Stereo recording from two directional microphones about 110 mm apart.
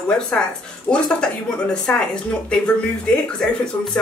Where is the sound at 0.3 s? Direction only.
10° left (ahead or behind).